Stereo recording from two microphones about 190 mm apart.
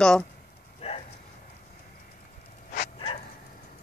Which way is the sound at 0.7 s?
30° left (ahead or behind).